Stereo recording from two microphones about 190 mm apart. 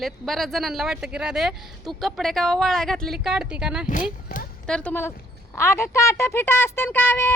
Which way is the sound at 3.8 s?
45° left (ahead or behind).